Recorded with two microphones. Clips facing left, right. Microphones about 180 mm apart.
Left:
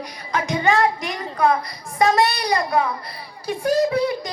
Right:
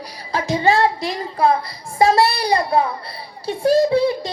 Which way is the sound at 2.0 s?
30° right (ahead or behind).